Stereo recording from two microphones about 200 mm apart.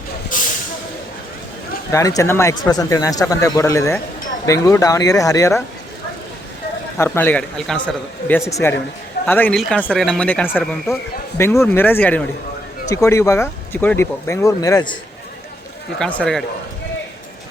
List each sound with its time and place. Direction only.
0.3 s vehicle: 40° left (ahead or behind)
1.9 s speech: 15° left (ahead or behind)
7.0 s speech: 10° left (ahead or behind)
16.0 s speech: 5° left (ahead or behind)